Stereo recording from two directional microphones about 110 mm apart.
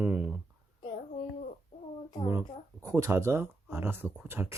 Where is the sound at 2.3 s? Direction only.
25° right (ahead or behind).